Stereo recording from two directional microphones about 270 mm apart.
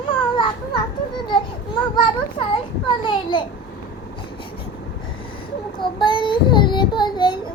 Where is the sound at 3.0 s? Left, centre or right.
Centre.